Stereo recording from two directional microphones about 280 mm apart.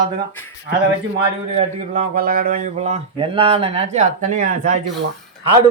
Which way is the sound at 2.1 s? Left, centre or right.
Right.